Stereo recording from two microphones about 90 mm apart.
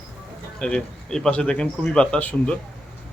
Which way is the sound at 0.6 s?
10° left (ahead or behind).